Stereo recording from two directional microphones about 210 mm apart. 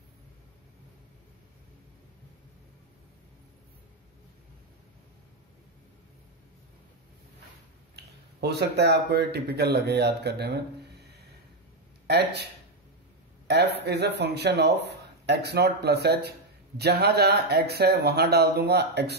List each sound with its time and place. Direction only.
7.9 s speech: 50° right (ahead or behind)
12.1 s speech: 50° right (ahead or behind)
13.5 s speech: 50° right (ahead or behind)